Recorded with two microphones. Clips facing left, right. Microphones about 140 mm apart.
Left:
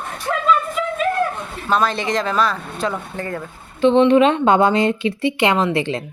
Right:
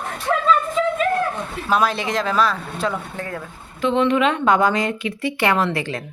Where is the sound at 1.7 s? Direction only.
5° right (ahead or behind).